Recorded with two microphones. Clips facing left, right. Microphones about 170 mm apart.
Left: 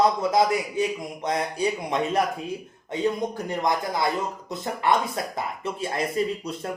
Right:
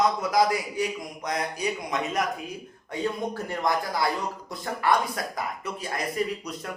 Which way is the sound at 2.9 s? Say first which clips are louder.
Left 3 dB; 20° left (ahead or behind).